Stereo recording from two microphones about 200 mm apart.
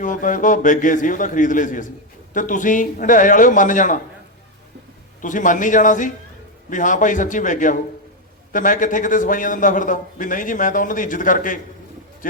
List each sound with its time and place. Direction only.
0.0 s a man's voice: 40° left (ahead or behind)
5.2 s a man's voice: 40° left (ahead or behind)